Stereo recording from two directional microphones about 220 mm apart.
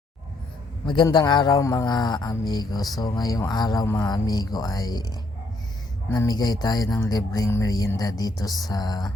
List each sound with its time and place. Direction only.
0.9 s a man's voice: 20° left (ahead or behind)